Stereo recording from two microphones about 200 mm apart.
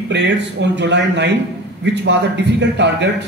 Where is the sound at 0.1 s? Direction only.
60° right (ahead or behind).